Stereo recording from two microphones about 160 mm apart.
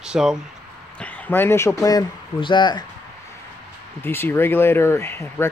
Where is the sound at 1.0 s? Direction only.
10° left (ahead or behind); by 2.8 s 30° left (ahead or behind).